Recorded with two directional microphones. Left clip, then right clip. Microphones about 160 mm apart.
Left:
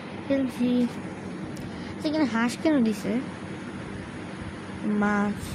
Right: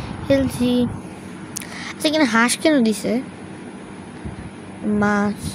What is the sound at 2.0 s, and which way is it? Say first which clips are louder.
Speech: right 9 dB; 55° right (ahead or behind).